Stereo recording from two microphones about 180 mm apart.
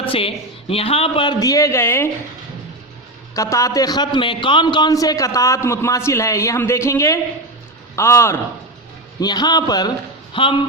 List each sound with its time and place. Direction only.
0.1 s speech: 30° left (ahead or behind); by 2.0 s 15° left (ahead or behind)
3.3 s a man's voice: 15° left (ahead or behind)